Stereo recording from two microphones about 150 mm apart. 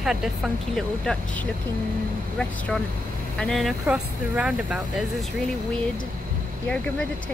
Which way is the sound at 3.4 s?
Centre (ahead or behind).